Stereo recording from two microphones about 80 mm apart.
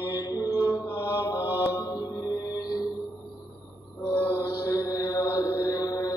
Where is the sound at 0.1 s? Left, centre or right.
Left.